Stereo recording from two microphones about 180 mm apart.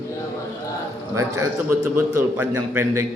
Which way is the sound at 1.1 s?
15° right (ahead or behind).